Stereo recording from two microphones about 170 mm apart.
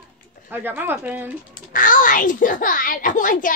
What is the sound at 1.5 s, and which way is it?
Speech, 55° left (ahead or behind).